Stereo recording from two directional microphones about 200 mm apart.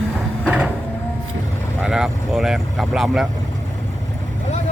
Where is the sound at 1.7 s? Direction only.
5° right (ahead or behind).